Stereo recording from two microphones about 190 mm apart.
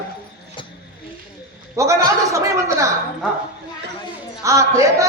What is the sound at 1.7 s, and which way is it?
Speech, 15° right (ahead or behind).